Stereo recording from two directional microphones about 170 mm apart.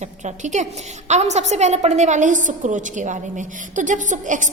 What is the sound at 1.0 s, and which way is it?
A woman's voice, 40° right (ahead or behind).